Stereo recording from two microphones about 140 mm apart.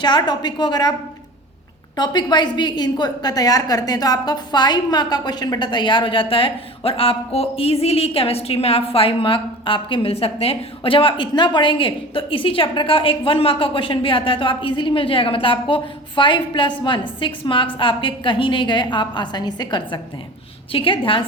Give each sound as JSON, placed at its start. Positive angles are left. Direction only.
{"t": 0.0, "sound": "a woman's voice", "side_deg": 35}
{"t": 2.0, "sound": "a woman's voice", "side_deg": 30}